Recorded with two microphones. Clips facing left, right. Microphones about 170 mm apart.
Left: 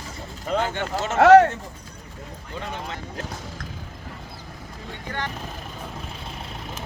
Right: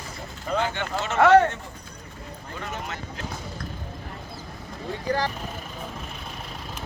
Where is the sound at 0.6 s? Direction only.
45° left (ahead or behind).